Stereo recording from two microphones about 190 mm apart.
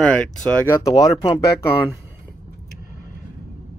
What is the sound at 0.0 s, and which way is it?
Speech, 5° left (ahead or behind).